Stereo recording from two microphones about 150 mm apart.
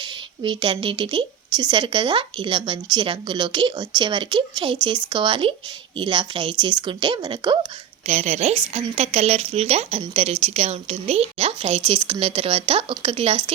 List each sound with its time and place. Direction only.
0.0 s a woman's voice: 30° right (ahead or behind)
8.0 s a woman's voice: 50° right (ahead or behind)